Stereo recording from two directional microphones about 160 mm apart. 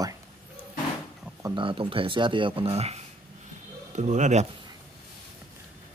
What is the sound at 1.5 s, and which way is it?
Speech, 30° right (ahead or behind).